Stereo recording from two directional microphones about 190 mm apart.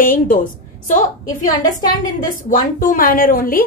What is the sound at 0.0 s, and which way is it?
Speech, 45° left (ahead or behind).